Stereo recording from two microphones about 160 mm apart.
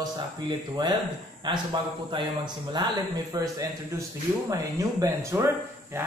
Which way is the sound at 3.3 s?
25° right (ahead or behind).